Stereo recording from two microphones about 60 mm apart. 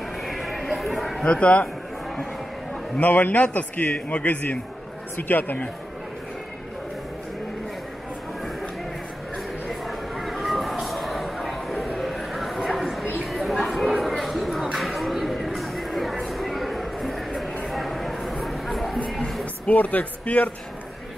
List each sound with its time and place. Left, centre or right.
0.2 s horse: centre
1.2 s a man's voice: left
3.0 s a man's voice: left
9.7 s a sound: centre
14.8 s music: centre
17.6 s a sound: centre
19.6 s speech: left